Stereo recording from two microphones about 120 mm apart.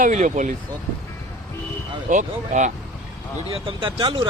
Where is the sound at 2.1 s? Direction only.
90° right.